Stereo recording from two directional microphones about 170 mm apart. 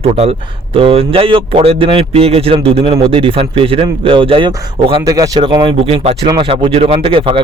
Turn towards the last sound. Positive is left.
turn(degrees=-30)  # may be behind; listen again after turning